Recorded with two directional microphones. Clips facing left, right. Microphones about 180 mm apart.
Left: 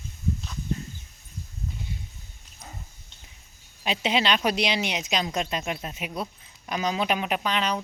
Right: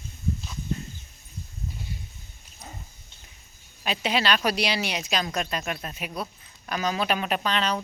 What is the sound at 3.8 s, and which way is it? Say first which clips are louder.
Speech: left 1 dB; 20° left (ahead or behind).